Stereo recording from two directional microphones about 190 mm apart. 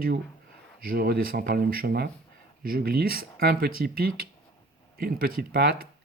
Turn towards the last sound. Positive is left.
turn(degrees=-50)  # may be behind; listen again after turning